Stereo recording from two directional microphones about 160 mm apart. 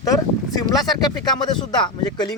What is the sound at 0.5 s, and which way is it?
Speech, 25° left (ahead or behind).